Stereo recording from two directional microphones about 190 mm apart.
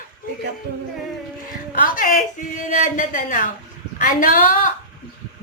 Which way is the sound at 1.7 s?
45° left (ahead or behind).